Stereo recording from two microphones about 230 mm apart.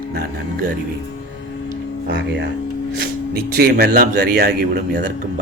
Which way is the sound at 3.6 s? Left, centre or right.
Right.